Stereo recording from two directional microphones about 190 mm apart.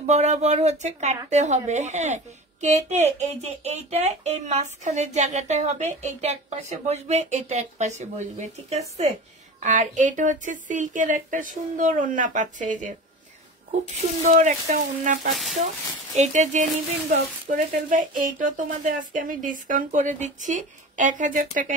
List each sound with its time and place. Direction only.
0.0 s a woman's voice: 35° right (ahead or behind)
14.2 s a woman's voice: 40° right (ahead or behind)
15.3 s speech: centre (ahead or behind)
16.2 s a woman's voice: 40° right (ahead or behind)